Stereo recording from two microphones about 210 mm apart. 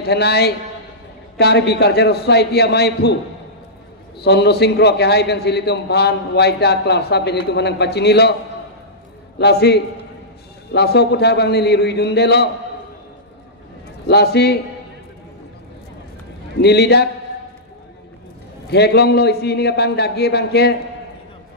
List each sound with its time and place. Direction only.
0.0 s a man's voice: 50° left (ahead or behind)
4.2 s a man's voice: 50° left (ahead or behind)
9.4 s a man's voice: 50° left (ahead or behind)
14.0 s a man's voice: 50° left (ahead or behind)
16.6 s a man's voice: 50° left (ahead or behind)
18.7 s a man's voice: 50° left (ahead or behind)